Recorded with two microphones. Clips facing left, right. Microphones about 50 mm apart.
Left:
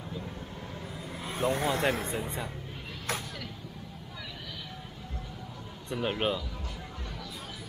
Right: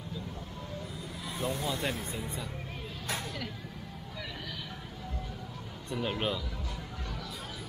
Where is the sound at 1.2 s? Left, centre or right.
Left.